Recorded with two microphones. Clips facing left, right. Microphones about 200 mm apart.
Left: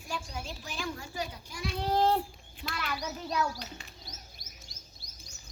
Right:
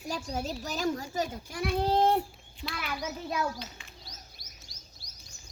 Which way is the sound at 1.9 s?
20° right (ahead or behind).